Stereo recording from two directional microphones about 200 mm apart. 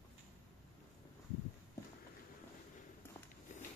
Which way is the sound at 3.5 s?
40° left (ahead or behind).